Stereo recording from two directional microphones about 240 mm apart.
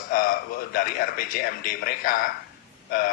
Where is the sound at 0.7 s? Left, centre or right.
Left.